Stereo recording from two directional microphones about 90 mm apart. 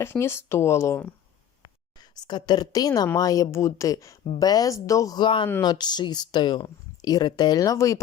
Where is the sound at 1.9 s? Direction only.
50° left (ahead or behind).